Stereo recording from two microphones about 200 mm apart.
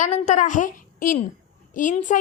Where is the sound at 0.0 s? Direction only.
35° left (ahead or behind).